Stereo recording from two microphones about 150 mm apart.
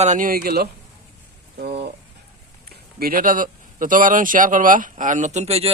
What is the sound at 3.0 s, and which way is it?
Speech, 75° right (ahead or behind).